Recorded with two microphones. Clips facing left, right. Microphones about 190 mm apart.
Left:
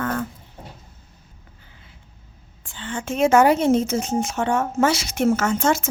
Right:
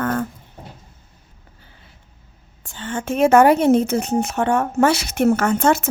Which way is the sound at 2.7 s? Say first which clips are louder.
Right 3 dB; 50° right (ahead or behind).